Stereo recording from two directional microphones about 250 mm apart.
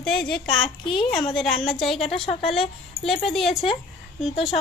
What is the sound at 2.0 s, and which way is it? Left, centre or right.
Speech, left.